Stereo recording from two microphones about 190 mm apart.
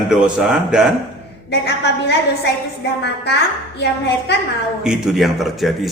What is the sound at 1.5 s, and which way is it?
A woman's voice, 60° left (ahead or behind).